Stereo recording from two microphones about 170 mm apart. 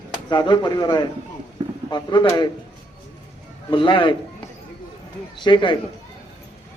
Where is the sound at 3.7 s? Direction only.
30° left (ahead or behind).